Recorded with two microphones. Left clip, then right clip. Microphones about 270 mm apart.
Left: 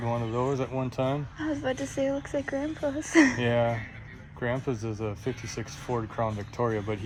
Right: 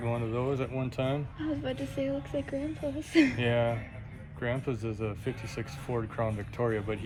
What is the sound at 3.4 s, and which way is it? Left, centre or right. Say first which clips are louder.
Speech: left 3 dB; left.